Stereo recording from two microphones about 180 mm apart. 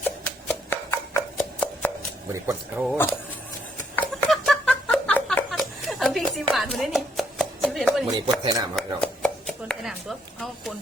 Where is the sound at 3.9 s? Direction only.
Centre (ahead or behind).